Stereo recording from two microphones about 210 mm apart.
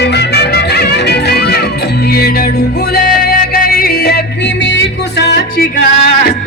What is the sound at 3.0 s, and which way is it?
Music, 45° left (ahead or behind).